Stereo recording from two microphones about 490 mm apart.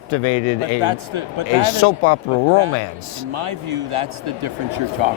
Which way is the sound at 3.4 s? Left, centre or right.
Right.